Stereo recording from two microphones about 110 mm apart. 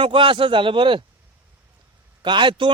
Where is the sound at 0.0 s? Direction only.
50° right (ahead or behind).